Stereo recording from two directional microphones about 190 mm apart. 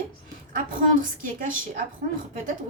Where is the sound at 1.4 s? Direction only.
45° right (ahead or behind).